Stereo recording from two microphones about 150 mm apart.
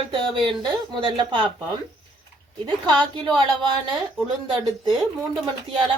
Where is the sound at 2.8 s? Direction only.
30° right (ahead or behind).